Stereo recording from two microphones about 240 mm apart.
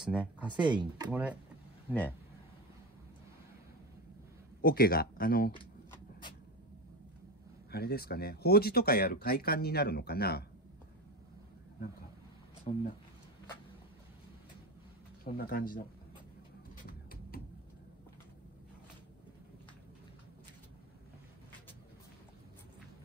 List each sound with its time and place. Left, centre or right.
0.0 s speech: centre
0.7 s speech: centre
1.9 s speech: centre
4.6 s speech: left
7.7 s speech: left
12.7 s speech: left
15.3 s speech: left